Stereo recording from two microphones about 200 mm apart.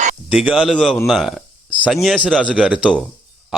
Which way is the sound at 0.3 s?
5° right (ahead or behind).